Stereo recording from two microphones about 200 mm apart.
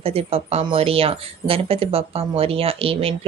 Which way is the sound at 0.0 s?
30° right (ahead or behind).